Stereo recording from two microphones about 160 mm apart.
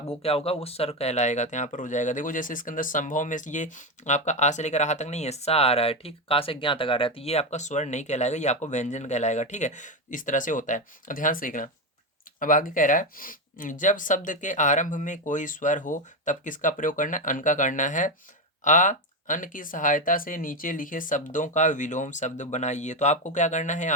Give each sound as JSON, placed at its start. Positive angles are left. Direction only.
{"t": 0.2, "sound": "speech", "side_deg": 35}